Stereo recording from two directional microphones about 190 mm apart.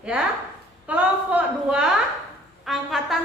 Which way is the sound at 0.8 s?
10° right (ahead or behind).